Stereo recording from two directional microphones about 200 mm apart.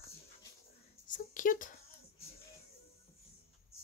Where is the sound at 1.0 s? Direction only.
40° left (ahead or behind).